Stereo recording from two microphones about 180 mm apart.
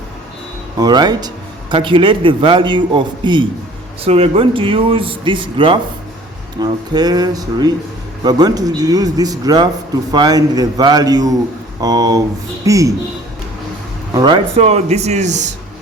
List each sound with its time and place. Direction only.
0.8 s a man's voice: 20° right (ahead or behind)
14.1 s speech: 25° right (ahead or behind); by 15.4 s 40° right (ahead or behind)